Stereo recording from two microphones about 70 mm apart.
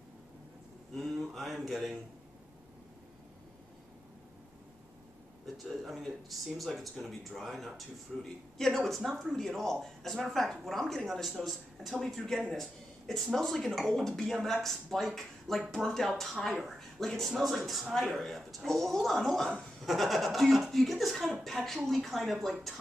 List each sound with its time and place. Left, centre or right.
0.9 s speech: centre
5.7 s speech: centre